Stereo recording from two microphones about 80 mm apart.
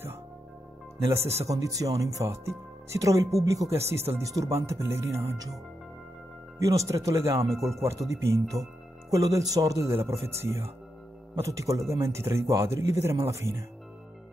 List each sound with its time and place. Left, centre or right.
1.0 s speech: right
6.6 s speech: right